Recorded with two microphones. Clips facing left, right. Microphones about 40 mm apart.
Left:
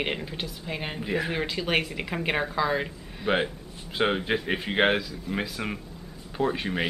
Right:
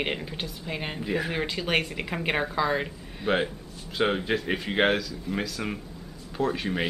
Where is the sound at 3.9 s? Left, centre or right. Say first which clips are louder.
Even; centre.